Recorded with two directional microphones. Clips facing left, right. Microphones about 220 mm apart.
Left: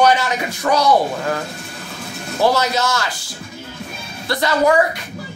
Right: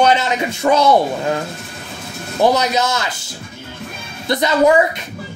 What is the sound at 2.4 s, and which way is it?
Speech, 20° right (ahead or behind).